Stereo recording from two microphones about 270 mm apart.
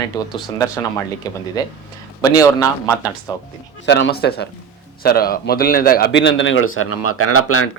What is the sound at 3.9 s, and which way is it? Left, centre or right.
A man's voice, left.